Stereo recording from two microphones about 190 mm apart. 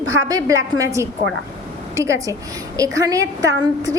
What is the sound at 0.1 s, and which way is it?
A woman's voice, 20° right (ahead or behind).